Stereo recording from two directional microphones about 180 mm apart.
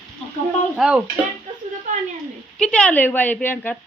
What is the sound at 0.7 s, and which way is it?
Speech, 5° right (ahead or behind).